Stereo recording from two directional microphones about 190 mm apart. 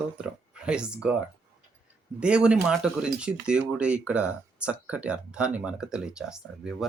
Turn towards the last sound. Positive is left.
turn(degrees=0)  # may be behind; listen again after turning